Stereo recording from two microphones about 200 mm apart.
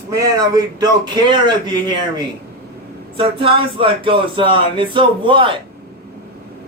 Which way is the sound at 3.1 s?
25° right (ahead or behind).